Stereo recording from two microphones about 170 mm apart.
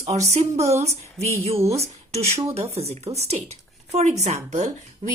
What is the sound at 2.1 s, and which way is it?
A woman's voice, 40° right (ahead or behind).